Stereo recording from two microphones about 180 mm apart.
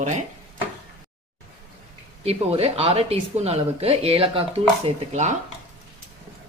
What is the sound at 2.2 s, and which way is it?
Speech, 35° right (ahead or behind).